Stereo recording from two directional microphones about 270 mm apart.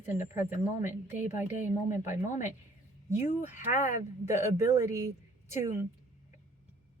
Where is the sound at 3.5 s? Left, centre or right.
Left.